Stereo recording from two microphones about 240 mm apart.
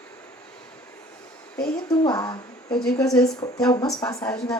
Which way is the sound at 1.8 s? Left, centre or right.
Centre.